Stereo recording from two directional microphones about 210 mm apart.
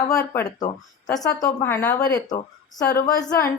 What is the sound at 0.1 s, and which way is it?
A woman's voice, 15° left (ahead or behind).